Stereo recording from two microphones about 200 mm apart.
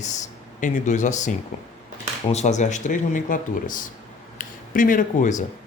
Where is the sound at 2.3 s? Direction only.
35° left (ahead or behind).